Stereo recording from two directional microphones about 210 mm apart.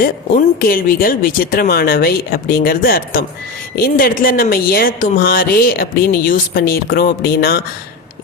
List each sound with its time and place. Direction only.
0.7 s speech: 45° left (ahead or behind)